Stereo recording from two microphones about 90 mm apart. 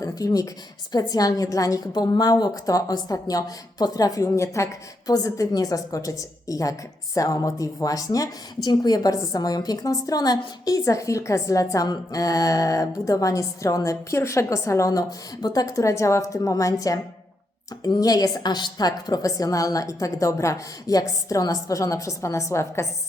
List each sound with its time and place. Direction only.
0.0 s a woman's voice: 40° left (ahead or behind)